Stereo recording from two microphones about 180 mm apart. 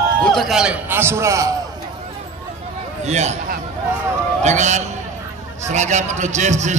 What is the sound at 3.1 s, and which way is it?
A man's voice, 40° right (ahead or behind).